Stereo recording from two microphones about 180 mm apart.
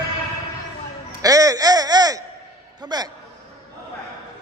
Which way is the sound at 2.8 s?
20° right (ahead or behind).